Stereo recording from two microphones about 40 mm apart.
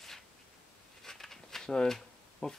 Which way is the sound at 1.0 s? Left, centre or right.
Centre.